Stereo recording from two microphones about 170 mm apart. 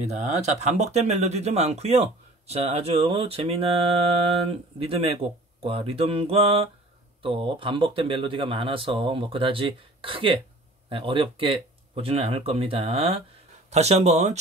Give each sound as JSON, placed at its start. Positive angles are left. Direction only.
{"t": 0.5, "sound": "speech", "side_deg": -40}